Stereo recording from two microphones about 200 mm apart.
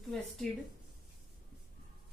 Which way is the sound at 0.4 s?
5° left (ahead or behind).